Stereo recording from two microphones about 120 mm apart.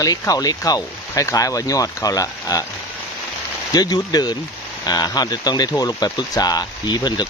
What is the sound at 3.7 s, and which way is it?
Speech, 35° left (ahead or behind).